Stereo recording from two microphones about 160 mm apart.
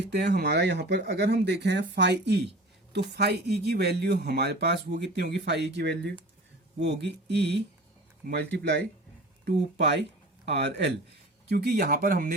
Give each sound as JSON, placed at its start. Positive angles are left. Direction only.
{"t": 0.0, "sound": "speech", "side_deg": -90}
{"t": 11.4, "sound": "speech", "side_deg": -75}